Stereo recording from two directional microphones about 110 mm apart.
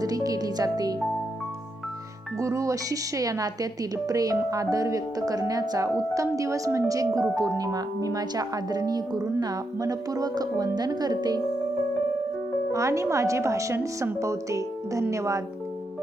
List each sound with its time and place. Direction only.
0.0 s speech: 35° right (ahead or behind)
2.4 s speech: 30° right (ahead or behind)
12.7 s a woman's voice: 30° right (ahead or behind)